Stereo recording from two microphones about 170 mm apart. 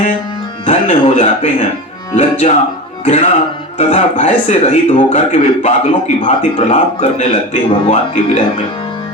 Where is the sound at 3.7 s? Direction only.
45° left (ahead or behind).